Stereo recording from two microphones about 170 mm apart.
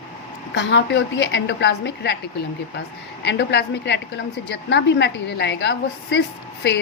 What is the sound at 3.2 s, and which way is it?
A woman's voice, 85° left.